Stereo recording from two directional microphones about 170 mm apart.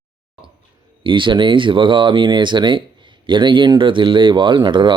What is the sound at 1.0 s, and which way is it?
Speech, 30° right (ahead or behind).